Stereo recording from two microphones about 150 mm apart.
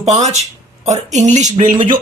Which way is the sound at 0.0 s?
50° right (ahead or behind).